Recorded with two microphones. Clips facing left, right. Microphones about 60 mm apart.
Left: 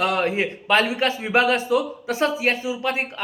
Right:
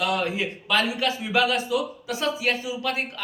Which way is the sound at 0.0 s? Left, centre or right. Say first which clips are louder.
Left 4 dB; left.